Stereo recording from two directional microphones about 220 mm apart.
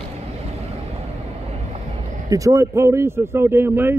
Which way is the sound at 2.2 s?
15° right (ahead or behind).